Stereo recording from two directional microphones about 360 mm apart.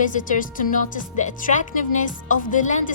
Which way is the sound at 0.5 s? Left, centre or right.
Left.